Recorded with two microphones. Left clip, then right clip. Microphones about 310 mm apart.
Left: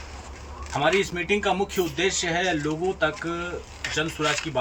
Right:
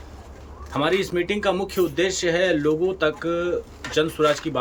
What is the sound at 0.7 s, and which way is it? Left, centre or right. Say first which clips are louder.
Speech: even; centre.